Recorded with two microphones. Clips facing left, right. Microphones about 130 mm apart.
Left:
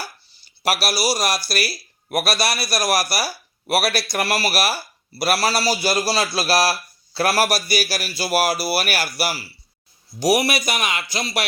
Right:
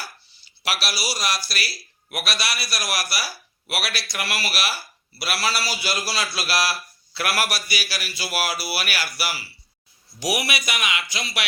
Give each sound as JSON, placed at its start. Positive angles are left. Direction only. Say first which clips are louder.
{"t": 0.6, "sound": "a man's voice", "louder": "left 7 dB", "side_deg": 45}